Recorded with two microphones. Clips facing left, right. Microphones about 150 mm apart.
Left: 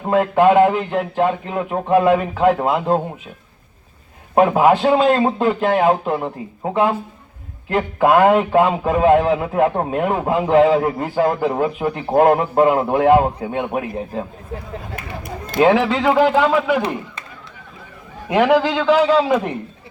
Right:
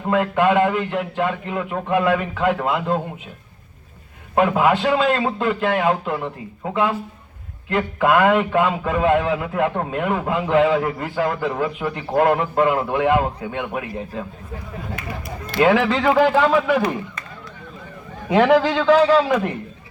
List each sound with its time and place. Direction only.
0.1 s a man's voice: 35° left (ahead or behind)
4.4 s a man's voice: 35° left (ahead or behind); by 15.6 s 50° left (ahead or behind)
15.6 s speech: 20° left (ahead or behind)
18.3 s speech: 10° left (ahead or behind)